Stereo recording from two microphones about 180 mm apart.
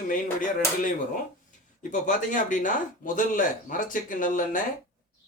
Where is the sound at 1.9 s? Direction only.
45° left (ahead or behind).